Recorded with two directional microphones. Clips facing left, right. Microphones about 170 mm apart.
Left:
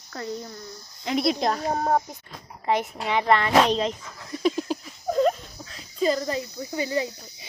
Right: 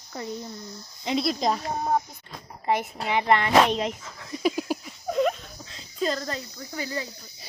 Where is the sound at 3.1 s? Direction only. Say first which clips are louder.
Left 1 dB; 20° right (ahead or behind).